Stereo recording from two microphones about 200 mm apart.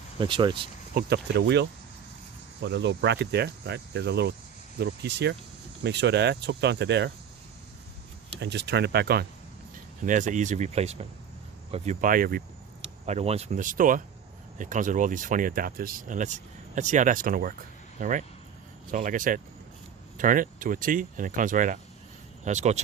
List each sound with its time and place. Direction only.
0.2 s speech: 25° right (ahead or behind)
0.9 s speech: 55° right (ahead or behind)
8.4 s speech: 60° right (ahead or behind)
10.1 s speech: 40° right (ahead or behind)
13.1 s speech: 30° right (ahead or behind)